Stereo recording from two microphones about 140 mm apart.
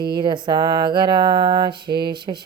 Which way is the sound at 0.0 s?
35° right (ahead or behind).